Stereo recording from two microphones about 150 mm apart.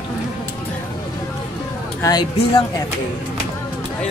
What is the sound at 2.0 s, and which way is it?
Speech, 25° left (ahead or behind).